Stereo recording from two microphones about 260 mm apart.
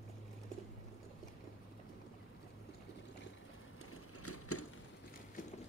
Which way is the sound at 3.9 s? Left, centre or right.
Left.